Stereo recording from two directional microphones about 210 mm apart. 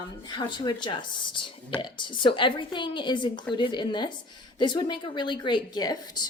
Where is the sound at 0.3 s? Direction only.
20° left (ahead or behind).